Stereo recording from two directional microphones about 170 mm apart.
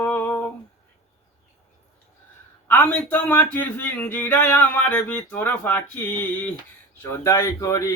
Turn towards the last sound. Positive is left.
turn(degrees=20)  # may be behind; listen again after turning